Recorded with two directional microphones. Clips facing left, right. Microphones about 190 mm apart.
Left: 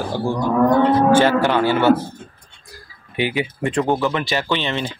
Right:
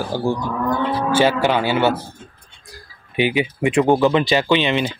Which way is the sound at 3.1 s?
20° right (ahead or behind).